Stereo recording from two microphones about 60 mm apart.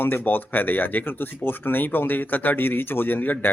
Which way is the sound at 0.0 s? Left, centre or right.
Left.